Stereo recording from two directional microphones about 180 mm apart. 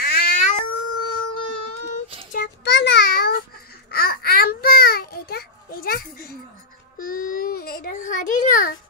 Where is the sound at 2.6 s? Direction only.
75° left (ahead or behind); by 8.7 s 45° left (ahead or behind).